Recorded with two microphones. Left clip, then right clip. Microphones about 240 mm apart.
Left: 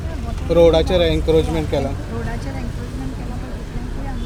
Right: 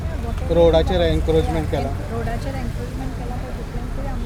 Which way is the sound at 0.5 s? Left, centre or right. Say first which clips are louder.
Left 2 dB; left.